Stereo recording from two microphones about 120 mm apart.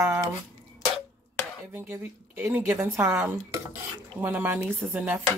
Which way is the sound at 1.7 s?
15° right (ahead or behind).